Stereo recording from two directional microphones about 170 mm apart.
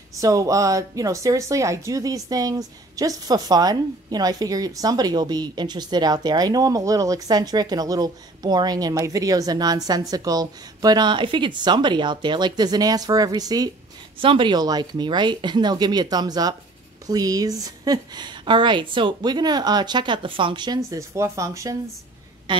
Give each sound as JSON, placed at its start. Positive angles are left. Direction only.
{"t": 0.2, "sound": "speech", "side_deg": -20}